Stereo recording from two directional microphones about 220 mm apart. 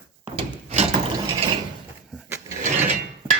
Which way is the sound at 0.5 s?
30° right (ahead or behind).